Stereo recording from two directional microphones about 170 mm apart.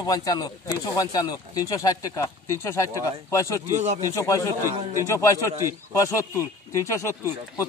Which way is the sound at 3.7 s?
40° right (ahead or behind).